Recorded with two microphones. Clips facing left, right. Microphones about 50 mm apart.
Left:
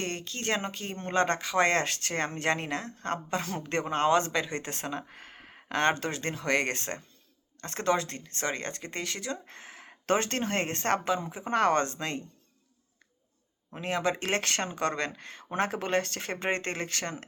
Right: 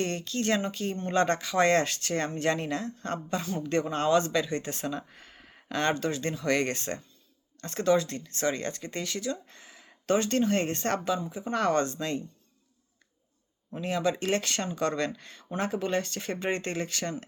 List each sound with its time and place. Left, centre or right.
0.0 s speech: left
13.8 s speech: left
15.5 s speech: left